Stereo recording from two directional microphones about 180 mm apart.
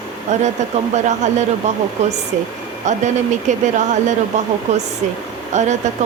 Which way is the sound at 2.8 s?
40° right (ahead or behind).